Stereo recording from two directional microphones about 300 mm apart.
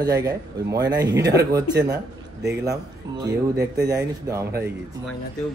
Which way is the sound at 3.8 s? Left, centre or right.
Centre.